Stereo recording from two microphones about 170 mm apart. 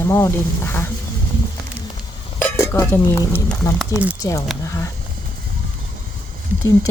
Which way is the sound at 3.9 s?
10° right (ahead or behind).